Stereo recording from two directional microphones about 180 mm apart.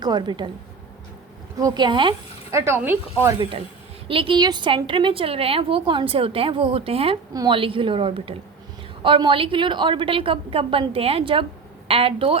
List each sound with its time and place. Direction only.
0.0 s a woman's voice: 25° right (ahead or behind)
1.5 s a woman's voice: 20° right (ahead or behind)
2.5 s speech: 15° right (ahead or behind)
4.1 s a woman's voice: 30° right (ahead or behind)